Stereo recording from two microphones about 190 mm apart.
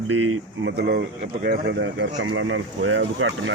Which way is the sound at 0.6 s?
55° right (ahead or behind).